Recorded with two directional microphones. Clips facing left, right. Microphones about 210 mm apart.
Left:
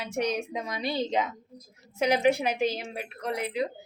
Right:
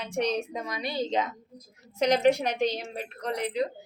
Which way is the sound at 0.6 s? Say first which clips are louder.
Left 1 dB; 25° left (ahead or behind).